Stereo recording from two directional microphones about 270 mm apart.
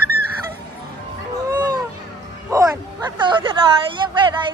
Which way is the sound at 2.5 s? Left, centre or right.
Centre.